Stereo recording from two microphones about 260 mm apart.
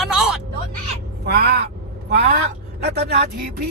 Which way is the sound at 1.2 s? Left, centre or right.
Right.